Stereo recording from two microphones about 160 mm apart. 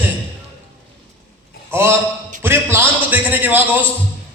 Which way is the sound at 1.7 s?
15° right (ahead or behind).